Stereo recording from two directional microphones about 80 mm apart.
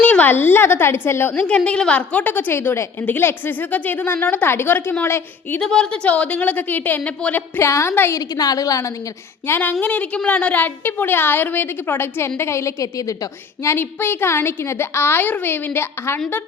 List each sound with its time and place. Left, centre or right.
0.0 s a woman's voice: left
5.5 s a woman's voice: centre
7.6 s a woman's voice: left
8.1 s a woman's voice: left
9.5 s a woman's voice: left
13.7 s a woman's voice: left